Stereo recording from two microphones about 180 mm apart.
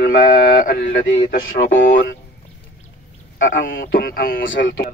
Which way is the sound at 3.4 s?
50° left (ahead or behind).